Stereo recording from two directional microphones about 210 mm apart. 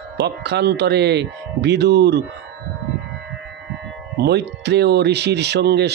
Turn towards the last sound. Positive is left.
turn(degrees=-50)  # may be behind; listen again after turning